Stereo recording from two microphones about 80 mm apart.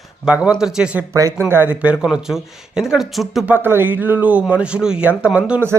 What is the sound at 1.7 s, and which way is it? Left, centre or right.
Speech, centre.